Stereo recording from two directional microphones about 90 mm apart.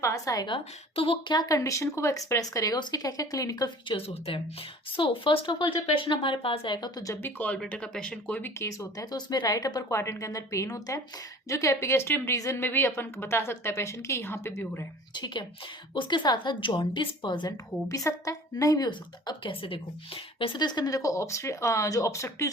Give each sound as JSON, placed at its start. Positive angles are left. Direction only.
{"t": 0.0, "sound": "speech", "side_deg": 35}
{"t": 0.4, "sound": "speech", "side_deg": 75}
{"t": 1.3, "sound": "a woman's voice", "side_deg": 45}
{"t": 3.8, "sound": "speech", "side_deg": 85}
{"t": 6.7, "sound": "a woman's voice", "side_deg": 50}
{"t": 7.2, "sound": "speech", "side_deg": 20}
{"t": 8.4, "sound": "a woman's voice", "side_deg": 25}
{"t": 8.6, "sound": "a woman's voice", "side_deg": 35}
{"t": 15.1, "sound": "a woman's voice", "side_deg": 60}
{"t": 17.8, "sound": "a woman's voice", "side_deg": 35}
{"t": 19.5, "sound": "speech", "side_deg": 80}
{"t": 20.6, "sound": "speech", "side_deg": 50}